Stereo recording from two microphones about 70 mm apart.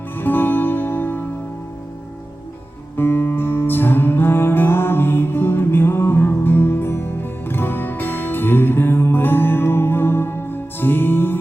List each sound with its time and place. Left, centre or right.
0.2 s music: left
3.0 s music: left